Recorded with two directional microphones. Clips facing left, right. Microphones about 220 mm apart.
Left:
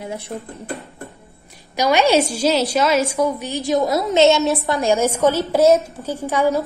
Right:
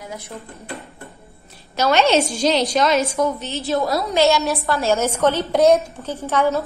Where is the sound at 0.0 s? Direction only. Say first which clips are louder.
Left 5 dB; 30° left (ahead or behind).